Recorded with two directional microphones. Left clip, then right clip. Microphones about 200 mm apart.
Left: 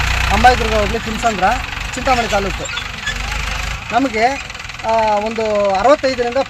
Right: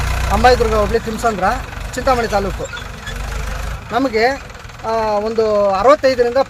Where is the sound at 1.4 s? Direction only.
5° right (ahead or behind).